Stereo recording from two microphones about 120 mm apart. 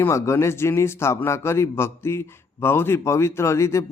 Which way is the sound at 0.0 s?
20° left (ahead or behind).